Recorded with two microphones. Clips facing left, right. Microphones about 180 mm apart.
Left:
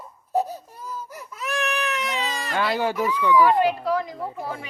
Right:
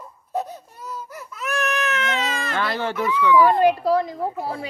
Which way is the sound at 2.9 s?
40° left (ahead or behind).